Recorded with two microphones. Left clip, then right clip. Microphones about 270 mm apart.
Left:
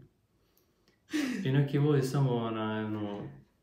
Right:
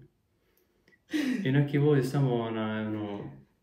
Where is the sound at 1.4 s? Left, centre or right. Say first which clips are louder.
Right 3 dB; centre.